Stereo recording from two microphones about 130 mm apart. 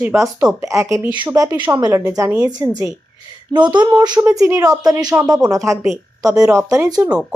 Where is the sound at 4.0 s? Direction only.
25° right (ahead or behind).